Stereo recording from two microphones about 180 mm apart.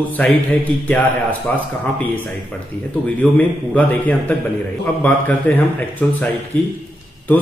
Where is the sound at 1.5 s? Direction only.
5° left (ahead or behind).